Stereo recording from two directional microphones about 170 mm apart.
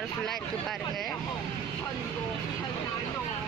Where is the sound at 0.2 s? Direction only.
Centre (ahead or behind).